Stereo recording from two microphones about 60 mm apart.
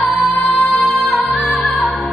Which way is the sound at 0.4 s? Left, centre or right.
Centre.